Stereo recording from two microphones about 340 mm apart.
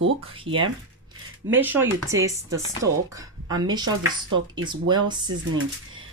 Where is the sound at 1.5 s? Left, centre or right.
Centre.